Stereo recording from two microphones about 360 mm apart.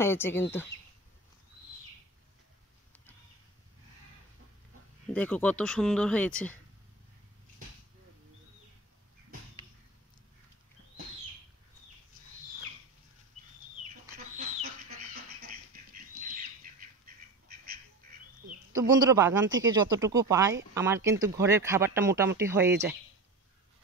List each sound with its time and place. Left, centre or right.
0.0 s speech: centre
5.0 s speech: centre
14.1 s chicken: right
15.4 s duck: right
18.7 s speech: centre